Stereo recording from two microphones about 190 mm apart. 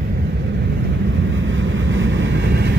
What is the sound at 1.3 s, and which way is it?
Vehicle, 90° right.